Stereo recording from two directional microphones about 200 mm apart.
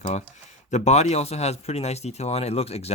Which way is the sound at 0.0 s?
35° left (ahead or behind).